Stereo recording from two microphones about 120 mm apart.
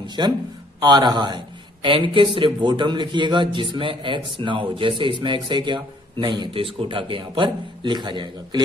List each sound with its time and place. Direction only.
0.0 s a man's voice: 35° right (ahead or behind)